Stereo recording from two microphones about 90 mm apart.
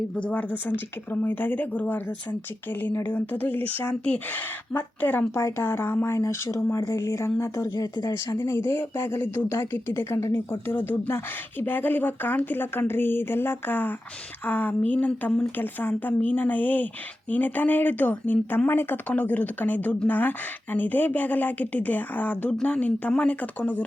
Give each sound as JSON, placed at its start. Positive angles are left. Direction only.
{"t": 0.2, "sound": "a woman's voice", "side_deg": 15}
{"t": 5.3, "sound": "a woman's voice", "side_deg": 35}